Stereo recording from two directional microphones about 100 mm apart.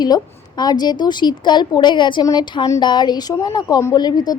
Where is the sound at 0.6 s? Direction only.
45° left (ahead or behind).